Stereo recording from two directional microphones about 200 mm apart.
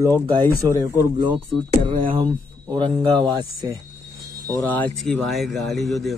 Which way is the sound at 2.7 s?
25° right (ahead or behind).